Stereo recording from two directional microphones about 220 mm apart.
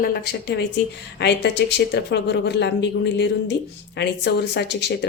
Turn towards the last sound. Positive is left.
turn(degrees=50)  # may be behind; listen again after turning